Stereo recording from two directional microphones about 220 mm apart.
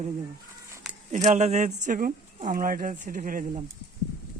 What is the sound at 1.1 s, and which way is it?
Speech, 35° right (ahead or behind).